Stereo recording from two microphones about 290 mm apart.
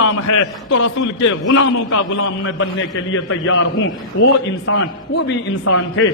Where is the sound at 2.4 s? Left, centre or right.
Left.